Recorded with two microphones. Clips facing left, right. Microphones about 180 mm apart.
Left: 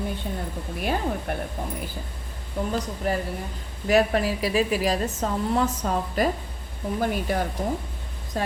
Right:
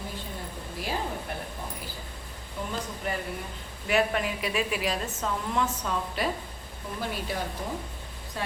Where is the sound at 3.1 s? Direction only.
40° left (ahead or behind).